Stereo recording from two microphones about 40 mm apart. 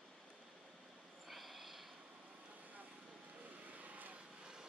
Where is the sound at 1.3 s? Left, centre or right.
Centre.